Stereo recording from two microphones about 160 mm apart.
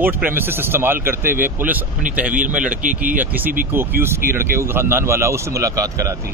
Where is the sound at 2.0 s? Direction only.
55° right (ahead or behind).